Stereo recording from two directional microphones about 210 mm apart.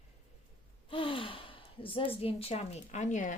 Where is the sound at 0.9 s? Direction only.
25° left (ahead or behind).